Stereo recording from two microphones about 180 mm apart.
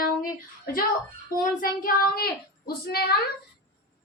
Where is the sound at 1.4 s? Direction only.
50° left (ahead or behind).